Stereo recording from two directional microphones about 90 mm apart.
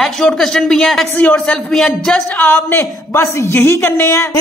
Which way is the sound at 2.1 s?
20° left (ahead or behind).